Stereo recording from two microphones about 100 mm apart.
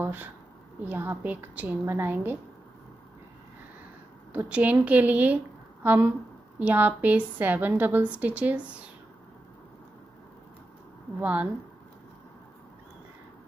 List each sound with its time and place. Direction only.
0.0 s a woman's voice: 20° right (ahead or behind)
4.3 s a woman's voice: 15° right (ahead or behind)
11.1 s a woman's voice: 15° right (ahead or behind)